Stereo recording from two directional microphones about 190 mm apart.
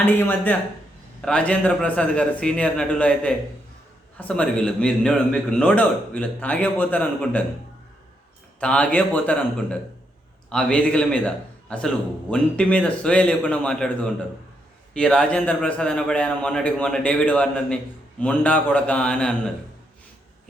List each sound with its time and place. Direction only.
0.0 s a man's voice: 10° left (ahead or behind)
8.6 s a man's voice: 5° left (ahead or behind)